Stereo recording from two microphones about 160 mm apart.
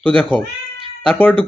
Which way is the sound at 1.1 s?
10° left (ahead or behind).